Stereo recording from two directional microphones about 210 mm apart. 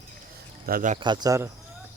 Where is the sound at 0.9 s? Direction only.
20° right (ahead or behind).